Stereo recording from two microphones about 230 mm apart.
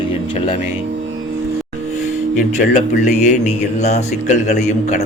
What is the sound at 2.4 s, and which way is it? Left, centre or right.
A man's voice, left.